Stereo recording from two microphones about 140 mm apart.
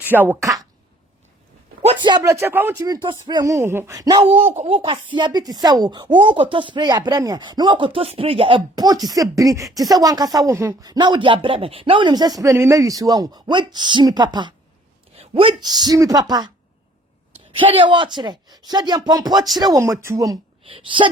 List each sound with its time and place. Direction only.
0.0 s a woman's voice: 15° right (ahead or behind)
2.0 s speech: 30° right (ahead or behind)
2.4 s speech: 15° right (ahead or behind)
2.8 s speech: 30° right (ahead or behind)
4.6 s speech: 40° right (ahead or behind)
15.1 s speech: 45° right (ahead or behind)
17.6 s speech: 35° right (ahead or behind)
20.7 s speech: 40° right (ahead or behind)